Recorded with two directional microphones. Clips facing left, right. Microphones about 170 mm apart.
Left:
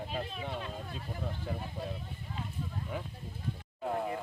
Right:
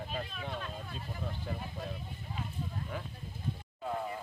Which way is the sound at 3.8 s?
55° left (ahead or behind).